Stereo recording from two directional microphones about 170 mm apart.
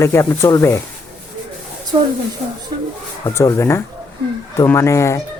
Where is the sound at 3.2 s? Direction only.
15° left (ahead or behind).